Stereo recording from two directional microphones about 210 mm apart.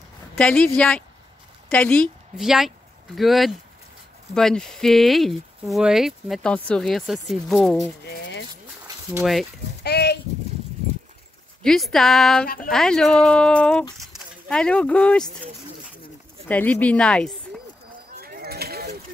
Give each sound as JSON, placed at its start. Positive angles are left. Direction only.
{"t": 0.4, "sound": "a woman's voice", "side_deg": 5}
{"t": 8.0, "sound": "a sound", "side_deg": 55}
{"t": 9.2, "sound": "speech", "side_deg": 0}
{"t": 9.8, "sound": "speech", "side_deg": 50}
{"t": 11.6, "sound": "speech", "side_deg": 0}
{"t": 16.4, "sound": "speech", "side_deg": 5}
{"t": 18.2, "sound": "a sound", "side_deg": -45}